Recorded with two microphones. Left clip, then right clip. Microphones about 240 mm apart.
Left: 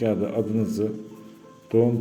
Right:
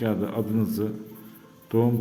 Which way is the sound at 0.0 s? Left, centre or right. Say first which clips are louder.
Left 3 dB; centre.